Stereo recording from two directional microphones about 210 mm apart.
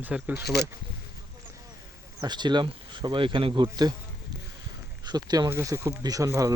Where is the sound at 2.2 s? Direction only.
20° right (ahead or behind).